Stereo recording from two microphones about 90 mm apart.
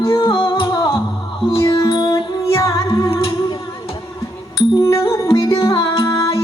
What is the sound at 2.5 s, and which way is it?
Music, 35° left (ahead or behind).